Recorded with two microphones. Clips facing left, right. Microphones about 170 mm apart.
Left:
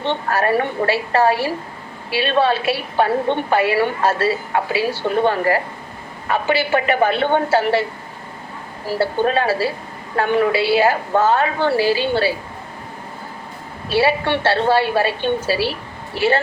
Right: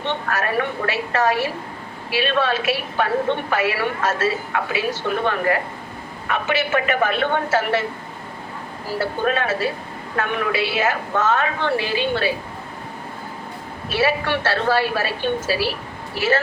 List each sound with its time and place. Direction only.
0.0 s a woman's voice: 30° left (ahead or behind)
8.9 s a woman's voice: 30° left (ahead or behind)
13.9 s a woman's voice: 30° left (ahead or behind)
16.2 s a woman's voice: centre (ahead or behind)